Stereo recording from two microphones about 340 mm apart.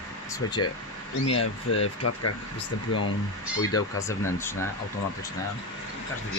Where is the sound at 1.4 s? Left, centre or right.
Left.